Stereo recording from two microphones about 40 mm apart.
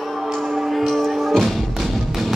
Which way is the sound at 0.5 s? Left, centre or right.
Centre.